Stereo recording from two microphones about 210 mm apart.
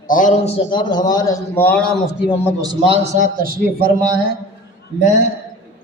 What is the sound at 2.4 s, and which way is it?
A man's voice, 20° right (ahead or behind).